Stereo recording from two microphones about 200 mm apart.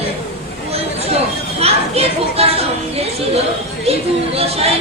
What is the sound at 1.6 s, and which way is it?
Speech, 30° right (ahead or behind).